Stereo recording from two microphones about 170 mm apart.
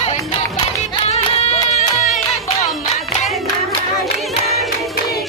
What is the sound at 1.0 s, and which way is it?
Music, 40° left (ahead or behind).